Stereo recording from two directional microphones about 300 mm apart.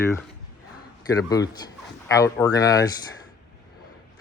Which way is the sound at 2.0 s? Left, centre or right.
Centre.